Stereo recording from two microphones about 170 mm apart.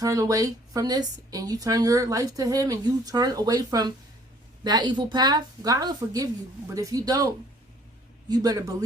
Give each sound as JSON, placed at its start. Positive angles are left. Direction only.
{"t": 0.0, "sound": "a woman's voice", "side_deg": -20}
{"t": 8.3, "sound": "a woman's voice", "side_deg": -20}